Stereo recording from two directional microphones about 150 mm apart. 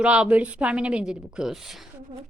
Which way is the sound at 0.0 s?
10° right (ahead or behind).